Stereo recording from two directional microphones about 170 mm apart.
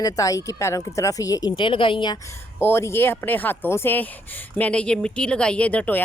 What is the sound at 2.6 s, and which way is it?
Speech, 15° left (ahead or behind).